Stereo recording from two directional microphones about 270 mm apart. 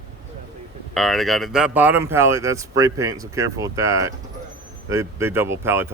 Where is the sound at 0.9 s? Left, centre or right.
Centre.